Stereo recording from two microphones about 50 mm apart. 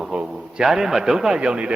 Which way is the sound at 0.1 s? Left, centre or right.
Centre.